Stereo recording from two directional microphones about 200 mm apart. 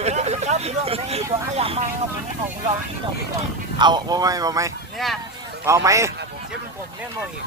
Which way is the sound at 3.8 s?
20° right (ahead or behind).